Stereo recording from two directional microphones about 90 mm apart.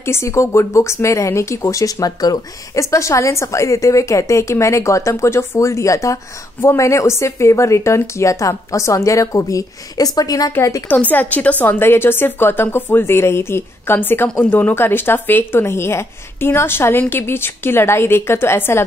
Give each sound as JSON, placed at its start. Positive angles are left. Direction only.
{"t": 0.0, "sound": "speech", "side_deg": 30}
{"t": 10.9, "sound": "a woman's voice", "side_deg": 20}